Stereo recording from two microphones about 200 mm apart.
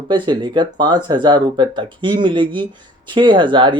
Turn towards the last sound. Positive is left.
turn(degrees=-25)  # may be behind; listen again after turning